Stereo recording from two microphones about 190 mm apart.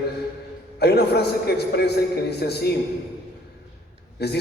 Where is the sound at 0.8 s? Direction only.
55° left (ahead or behind).